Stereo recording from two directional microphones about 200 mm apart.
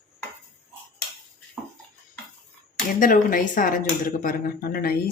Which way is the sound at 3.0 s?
45° left (ahead or behind).